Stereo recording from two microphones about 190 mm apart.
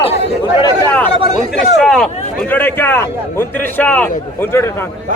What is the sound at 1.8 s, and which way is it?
A man's voice, 5° left (ahead or behind).